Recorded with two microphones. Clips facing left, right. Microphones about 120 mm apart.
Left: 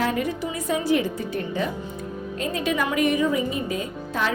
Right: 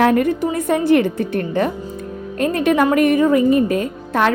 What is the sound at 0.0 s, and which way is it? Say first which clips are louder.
A woman's voice: right 10 dB; 55° right (ahead or behind).